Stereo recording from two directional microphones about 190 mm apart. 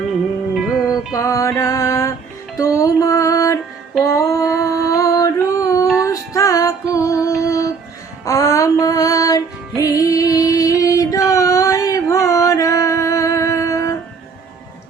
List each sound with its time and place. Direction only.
0.5 s music: 5° right (ahead or behind)
1.1 s music: 15° left (ahead or behind)
4.0 s a sound: 15° left (ahead or behind)
6.0 s music: 15° left (ahead or behind)